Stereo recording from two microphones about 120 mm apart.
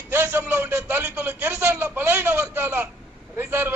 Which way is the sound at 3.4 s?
20° right (ahead or behind).